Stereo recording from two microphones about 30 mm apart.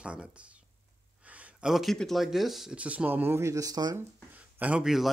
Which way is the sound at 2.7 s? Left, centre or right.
Right.